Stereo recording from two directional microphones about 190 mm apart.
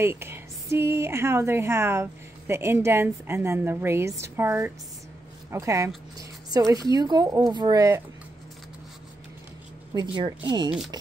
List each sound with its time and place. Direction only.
0.0 s a woman's voice: 15° right (ahead or behind)
9.9 s speech: 25° right (ahead or behind)